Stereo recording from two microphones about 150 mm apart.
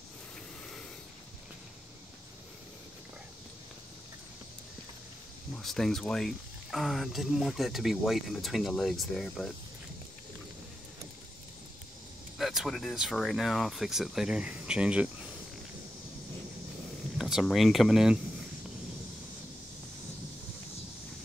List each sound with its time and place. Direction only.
5.6 s speech: centre (ahead or behind)
12.4 s speech: centre (ahead or behind)
17.2 s speech: centre (ahead or behind)